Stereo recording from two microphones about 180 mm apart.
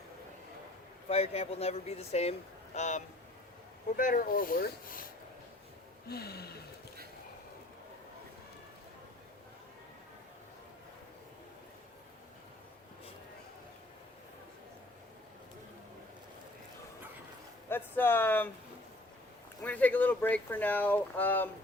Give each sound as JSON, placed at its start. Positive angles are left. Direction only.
{"t": 1.0, "sound": "speech", "side_deg": 35}
{"t": 6.1, "sound": "gasp", "side_deg": 60}
{"t": 17.7, "sound": "a sound", "side_deg": 10}
{"t": 19.6, "sound": "speech", "side_deg": 10}